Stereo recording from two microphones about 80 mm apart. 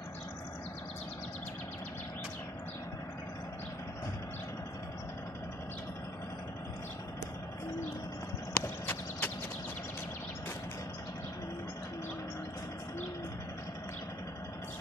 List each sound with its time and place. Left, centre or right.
8.5 s clip-clop: left